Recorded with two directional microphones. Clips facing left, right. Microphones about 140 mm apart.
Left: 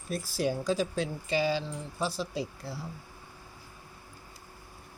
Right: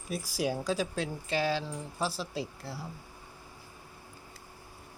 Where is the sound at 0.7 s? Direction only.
Centre (ahead or behind).